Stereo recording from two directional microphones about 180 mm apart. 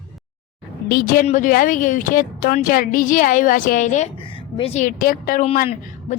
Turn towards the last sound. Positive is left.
turn(degrees=50)  # may be behind; listen again after turning